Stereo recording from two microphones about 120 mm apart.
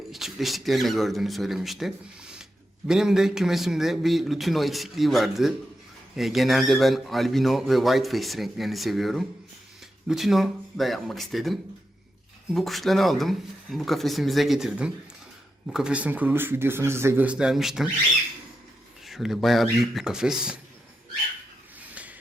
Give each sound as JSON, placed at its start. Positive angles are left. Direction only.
{"t": 0.1, "sound": "speech", "side_deg": 0}
{"t": 12.5, "sound": "speech", "side_deg": 0}
{"t": 17.2, "sound": "speech", "side_deg": -5}
{"t": 19.0, "sound": "speech", "side_deg": 0}
{"t": 21.8, "sound": "a sound", "side_deg": -15}